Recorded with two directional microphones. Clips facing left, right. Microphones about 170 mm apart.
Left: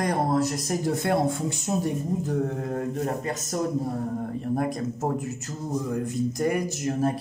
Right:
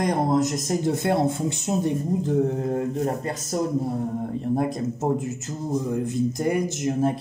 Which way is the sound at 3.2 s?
30° right (ahead or behind).